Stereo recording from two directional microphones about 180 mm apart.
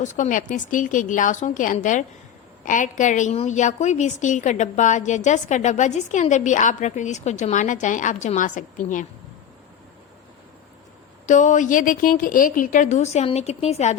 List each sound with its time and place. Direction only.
0.0 s a woman's voice: 45° left (ahead or behind)
11.3 s a woman's voice: 45° left (ahead or behind)